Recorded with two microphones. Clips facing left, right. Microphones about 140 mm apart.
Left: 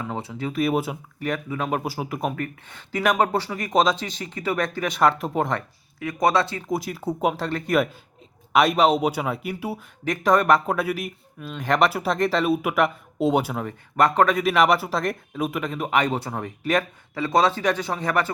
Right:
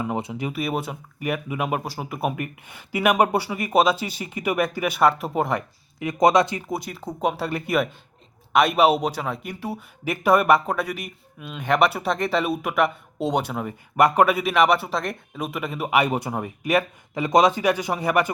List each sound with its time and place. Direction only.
0.0 s speech: 20° right (ahead or behind)
0.5 s speech: centre (ahead or behind)
1.2 s speech: 10° right (ahead or behind)
1.8 s speech: 5° left (ahead or behind)
2.3 s speech: 10° right (ahead or behind)
5.5 s speech: 20° right (ahead or behind)
6.7 s speech: centre (ahead or behind)
7.3 s speech: 5° right (ahead or behind)
9.0 s speech: 5° left (ahead or behind)
10.0 s speech: 10° right (ahead or behind)